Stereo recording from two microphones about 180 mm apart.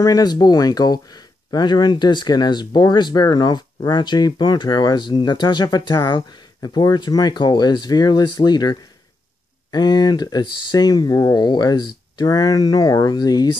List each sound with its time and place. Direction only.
0.0 s speech: 20° left (ahead or behind)